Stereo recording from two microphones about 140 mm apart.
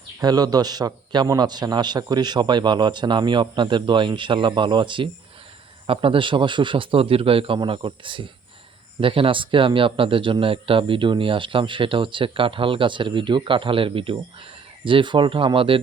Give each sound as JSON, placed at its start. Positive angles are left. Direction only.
{"t": 0.2, "sound": "speech", "side_deg": -30}